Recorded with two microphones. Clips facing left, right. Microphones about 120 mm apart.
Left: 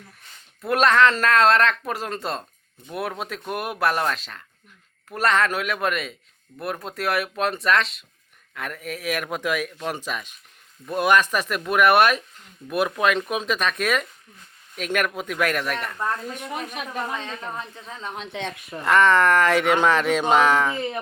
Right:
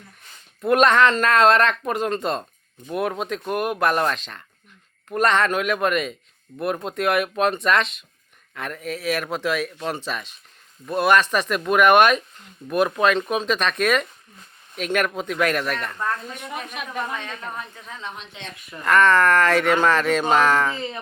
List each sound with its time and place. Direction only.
0.6 s speech: centre (ahead or behind)
16.0 s speech: 20° left (ahead or behind)
18.3 s a woman's voice: 70° left (ahead or behind)
18.9 s speech: 20° left (ahead or behind)